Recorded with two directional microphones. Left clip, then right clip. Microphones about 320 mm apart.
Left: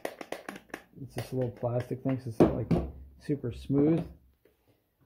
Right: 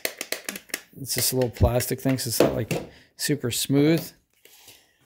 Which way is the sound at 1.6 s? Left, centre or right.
Right.